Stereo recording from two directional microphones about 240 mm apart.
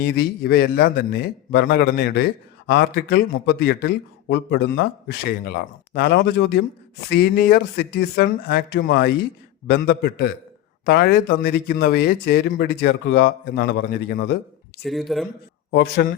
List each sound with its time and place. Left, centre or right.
0.0 s a man's voice: left
14.8 s speech: centre
15.7 s a man's voice: left